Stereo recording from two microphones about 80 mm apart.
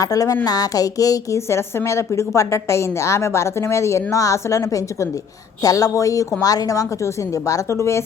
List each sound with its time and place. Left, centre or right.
0.0 s a woman's voice: left
1.5 s a woman's voice: left